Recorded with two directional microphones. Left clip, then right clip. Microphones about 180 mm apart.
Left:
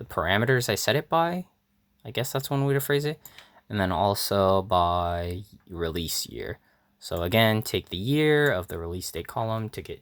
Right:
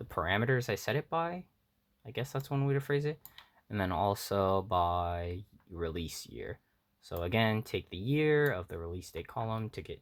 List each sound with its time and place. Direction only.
0.2 s speech: 25° left (ahead or behind)
3.7 s speech: 20° left (ahead or behind)